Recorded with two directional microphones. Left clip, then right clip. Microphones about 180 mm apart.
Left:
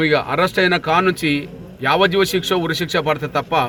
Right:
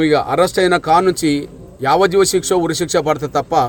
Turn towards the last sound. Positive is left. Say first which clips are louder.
# right 3 dB
turn(degrees=-25)  # may be behind; listen again after turning